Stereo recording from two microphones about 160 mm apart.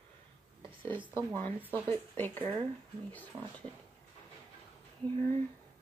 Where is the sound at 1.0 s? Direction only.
20° right (ahead or behind).